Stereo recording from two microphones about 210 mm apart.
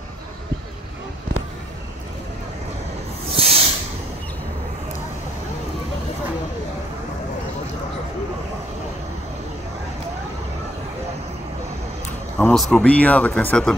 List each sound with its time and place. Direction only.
3.3 s hiss: 25° right (ahead or behind)
12.4 s speech: centre (ahead or behind)